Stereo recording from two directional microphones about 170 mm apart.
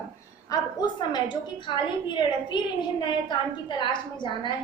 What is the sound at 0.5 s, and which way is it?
A woman's voice, 20° left (ahead or behind).